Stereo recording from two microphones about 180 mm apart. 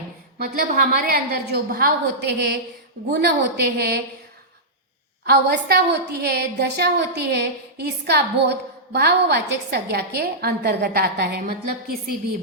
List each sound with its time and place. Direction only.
0.4 s a woman's voice: 55° right (ahead or behind)
5.2 s a woman's voice: 60° right (ahead or behind)